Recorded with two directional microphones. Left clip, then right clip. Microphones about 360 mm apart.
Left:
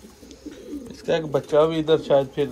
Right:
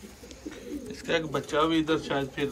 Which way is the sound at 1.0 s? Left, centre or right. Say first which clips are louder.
Left 6 dB; centre.